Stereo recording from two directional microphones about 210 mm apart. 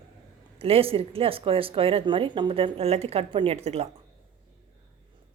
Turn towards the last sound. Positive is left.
turn(degrees=-30)  # may be behind; listen again after turning